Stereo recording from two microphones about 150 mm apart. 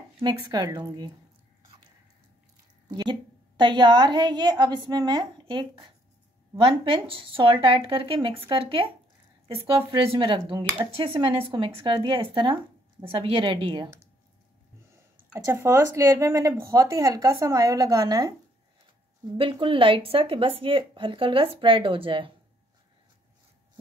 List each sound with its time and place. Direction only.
0.2 s speech: 25° right (ahead or behind)
2.9 s a woman's voice: 30° right (ahead or behind)
15.3 s speech: 20° right (ahead or behind)
19.3 s a woman's voice: 35° right (ahead or behind)